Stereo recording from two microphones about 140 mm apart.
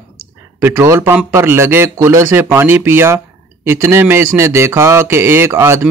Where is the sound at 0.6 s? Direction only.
15° right (ahead or behind).